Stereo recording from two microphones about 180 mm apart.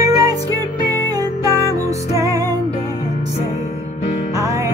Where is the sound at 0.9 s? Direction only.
20° right (ahead or behind).